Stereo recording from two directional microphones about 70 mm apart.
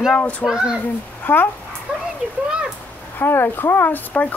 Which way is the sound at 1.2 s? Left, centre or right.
Left.